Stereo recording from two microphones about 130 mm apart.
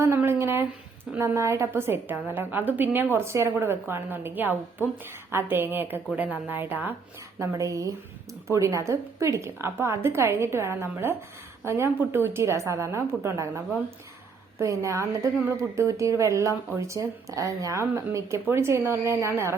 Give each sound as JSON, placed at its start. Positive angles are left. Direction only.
{"t": 0.0, "sound": "a sound", "side_deg": -20}
{"t": 1.2, "sound": "a woman's voice", "side_deg": -20}
{"t": 14.6, "sound": "speech", "side_deg": -25}